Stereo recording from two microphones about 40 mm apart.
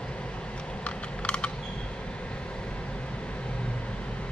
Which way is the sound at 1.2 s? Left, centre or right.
Left.